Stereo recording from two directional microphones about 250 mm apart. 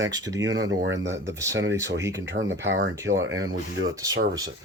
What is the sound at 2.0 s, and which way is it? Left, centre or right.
Speech, centre.